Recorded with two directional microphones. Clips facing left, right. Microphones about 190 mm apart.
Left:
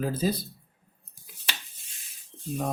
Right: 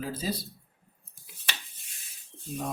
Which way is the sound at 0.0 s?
55° left (ahead or behind).